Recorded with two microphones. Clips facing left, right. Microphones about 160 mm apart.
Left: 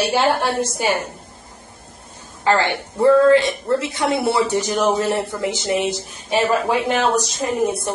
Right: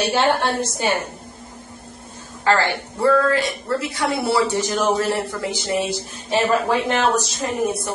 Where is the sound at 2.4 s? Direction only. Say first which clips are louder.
Left 1 dB; 20° left (ahead or behind).